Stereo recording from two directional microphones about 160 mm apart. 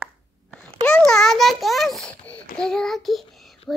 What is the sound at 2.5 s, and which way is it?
A child's voice, 5° left (ahead or behind).